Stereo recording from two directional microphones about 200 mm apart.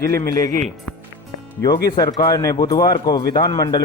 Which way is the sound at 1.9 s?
20° left (ahead or behind).